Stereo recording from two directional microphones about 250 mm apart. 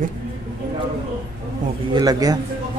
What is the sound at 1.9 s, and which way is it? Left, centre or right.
Speech, centre.